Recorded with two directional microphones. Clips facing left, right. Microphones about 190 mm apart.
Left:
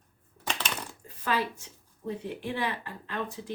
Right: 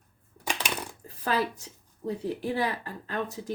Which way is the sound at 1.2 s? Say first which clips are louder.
Right 2 dB; 40° right (ahead or behind).